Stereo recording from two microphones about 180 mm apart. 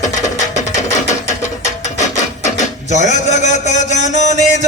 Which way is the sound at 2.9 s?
40° left (ahead or behind).